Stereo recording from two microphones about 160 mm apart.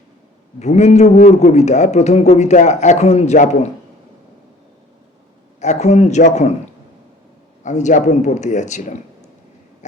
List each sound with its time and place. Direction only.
0.6 s a man's voice: 45° left (ahead or behind)
5.5 s a man's voice: 45° left (ahead or behind)
7.6 s a man's voice: 50° left (ahead or behind)